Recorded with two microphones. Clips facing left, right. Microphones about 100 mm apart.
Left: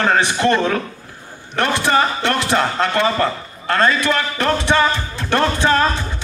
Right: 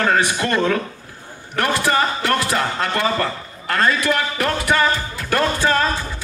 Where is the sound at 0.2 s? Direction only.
30° left (ahead or behind).